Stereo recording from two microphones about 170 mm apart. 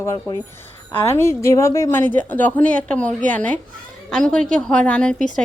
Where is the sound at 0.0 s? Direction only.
15° left (ahead or behind).